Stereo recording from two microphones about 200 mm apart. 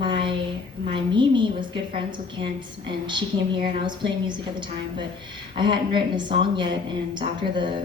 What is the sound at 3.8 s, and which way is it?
Speech, 20° right (ahead or behind).